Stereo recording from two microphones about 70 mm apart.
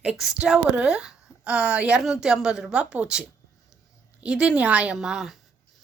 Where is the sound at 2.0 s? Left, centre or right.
Centre.